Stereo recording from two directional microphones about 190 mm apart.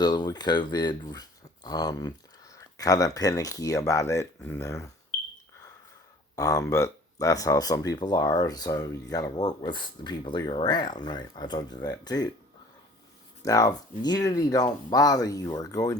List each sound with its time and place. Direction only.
0.0 s speech: 20° left (ahead or behind)
6.3 s speech: 20° left (ahead or behind)
13.4 s speech: 20° left (ahead or behind)